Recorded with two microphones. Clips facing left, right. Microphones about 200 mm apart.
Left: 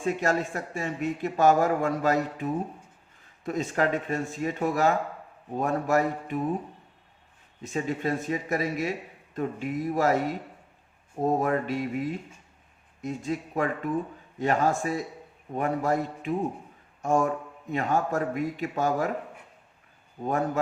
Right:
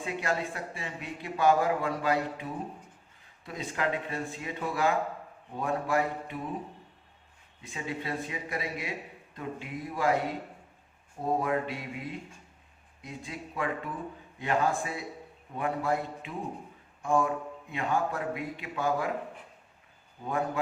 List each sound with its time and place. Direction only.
0.0 s speech: 45° left (ahead or behind)
7.6 s speech: 45° left (ahead or behind)
20.2 s speech: 45° left (ahead or behind)